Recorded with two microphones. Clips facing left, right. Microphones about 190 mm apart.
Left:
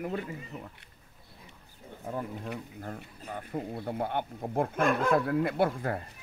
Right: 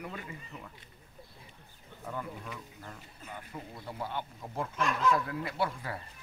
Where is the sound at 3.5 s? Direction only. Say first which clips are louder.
Left 9 dB; 55° left (ahead or behind).